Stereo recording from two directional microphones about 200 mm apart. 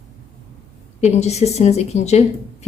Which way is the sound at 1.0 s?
35° left (ahead or behind).